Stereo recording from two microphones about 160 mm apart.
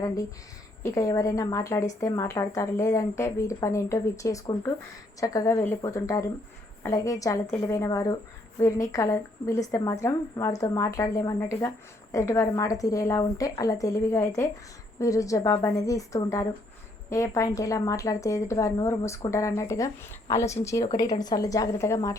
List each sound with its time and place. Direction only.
0.8 s a woman's voice: 20° left (ahead or behind)